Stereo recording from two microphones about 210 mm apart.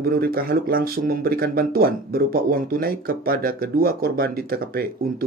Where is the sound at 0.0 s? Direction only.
45° right (ahead or behind).